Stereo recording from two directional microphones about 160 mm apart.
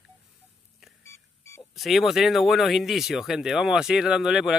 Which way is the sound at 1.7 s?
Centre (ahead or behind).